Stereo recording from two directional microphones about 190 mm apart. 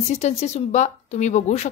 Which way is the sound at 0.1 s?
35° left (ahead or behind).